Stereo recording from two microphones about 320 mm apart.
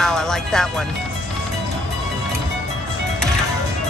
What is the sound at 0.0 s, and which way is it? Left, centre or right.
Speech, centre.